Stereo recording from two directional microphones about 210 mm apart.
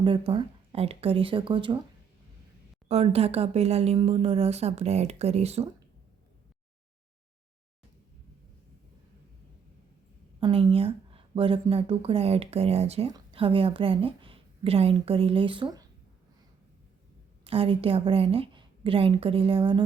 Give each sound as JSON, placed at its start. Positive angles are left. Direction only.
{"t": 0.0, "sound": "speech", "side_deg": -25}
{"t": 2.9, "sound": "speech", "side_deg": -30}
{"t": 10.4, "sound": "a woman's voice", "side_deg": -25}
{"t": 17.4, "sound": "speech", "side_deg": -25}